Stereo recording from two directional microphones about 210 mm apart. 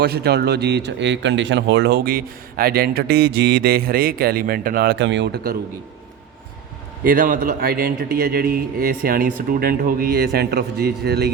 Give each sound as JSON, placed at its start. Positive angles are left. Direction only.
{"t": 0.0, "sound": "speech", "side_deg": -50}
{"t": 7.0, "sound": "speech", "side_deg": -45}